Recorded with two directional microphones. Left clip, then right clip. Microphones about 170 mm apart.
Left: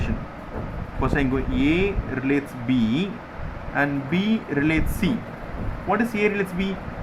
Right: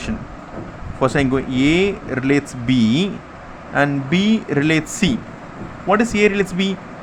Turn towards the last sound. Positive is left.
turn(degrees=-45)  # may be behind; listen again after turning